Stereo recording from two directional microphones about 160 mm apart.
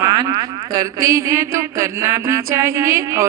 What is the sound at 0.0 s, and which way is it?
Speech, 25° right (ahead or behind).